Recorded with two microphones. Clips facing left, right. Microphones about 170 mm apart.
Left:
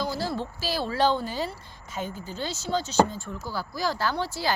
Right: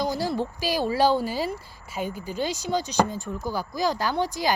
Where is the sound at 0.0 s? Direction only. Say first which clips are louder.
Right 3 dB; 15° right (ahead or behind).